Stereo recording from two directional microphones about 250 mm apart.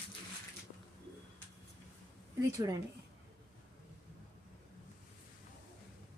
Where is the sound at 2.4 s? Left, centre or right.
Centre.